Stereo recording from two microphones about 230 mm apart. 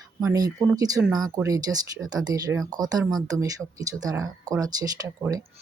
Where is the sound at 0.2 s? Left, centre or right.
Centre.